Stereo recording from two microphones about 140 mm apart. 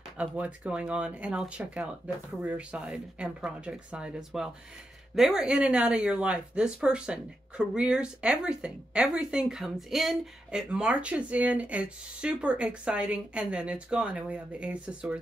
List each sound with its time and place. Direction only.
0.2 s speech: 10° right (ahead or behind)